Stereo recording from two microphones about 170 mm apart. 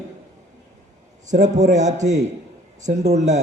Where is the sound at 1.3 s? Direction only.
45° right (ahead or behind).